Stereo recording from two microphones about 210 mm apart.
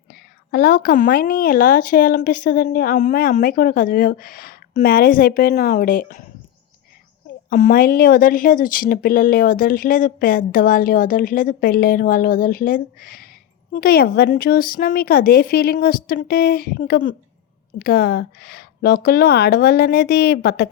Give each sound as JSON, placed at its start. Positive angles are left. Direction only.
{"t": 0.1, "sound": "a woman's voice", "side_deg": 45}
{"t": 7.5, "sound": "a woman's voice", "side_deg": 40}